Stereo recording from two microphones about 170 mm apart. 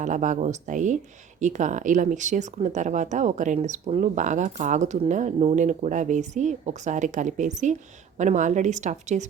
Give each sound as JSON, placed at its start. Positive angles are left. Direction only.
{"t": 0.0, "sound": "speech", "side_deg": -45}